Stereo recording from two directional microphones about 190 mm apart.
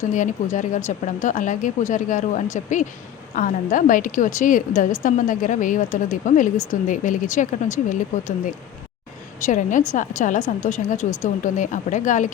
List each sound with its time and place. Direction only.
0.1 s a woman's voice: 40° left (ahead or behind)
9.4 s speech: 40° left (ahead or behind)